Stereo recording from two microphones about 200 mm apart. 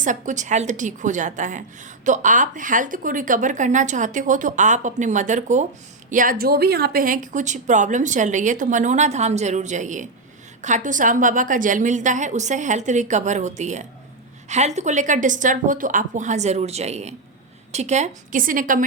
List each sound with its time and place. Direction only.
0.0 s speech: 40° right (ahead or behind)